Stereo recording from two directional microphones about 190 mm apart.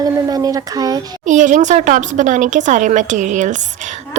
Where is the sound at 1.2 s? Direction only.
40° right (ahead or behind).